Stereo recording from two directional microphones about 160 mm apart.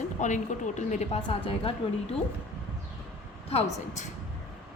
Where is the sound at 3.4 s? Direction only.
40° left (ahead or behind).